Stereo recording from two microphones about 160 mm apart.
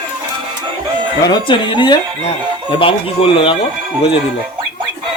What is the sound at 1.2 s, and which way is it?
Speech, 30° left (ahead or behind).